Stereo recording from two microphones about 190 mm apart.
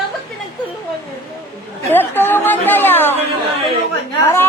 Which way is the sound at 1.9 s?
10° left (ahead or behind).